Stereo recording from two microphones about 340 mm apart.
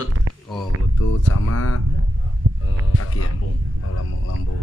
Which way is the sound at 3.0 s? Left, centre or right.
Left.